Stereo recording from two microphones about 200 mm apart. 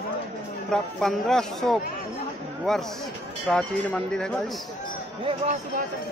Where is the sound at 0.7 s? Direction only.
Centre (ahead or behind).